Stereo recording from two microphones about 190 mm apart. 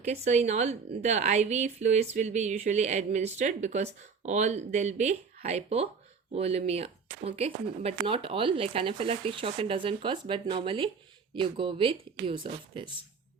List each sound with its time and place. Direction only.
0.0 s a woman's voice: 35° right (ahead or behind)